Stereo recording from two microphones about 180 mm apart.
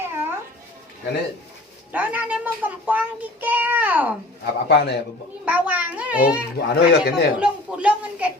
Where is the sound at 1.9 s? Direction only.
10° right (ahead or behind).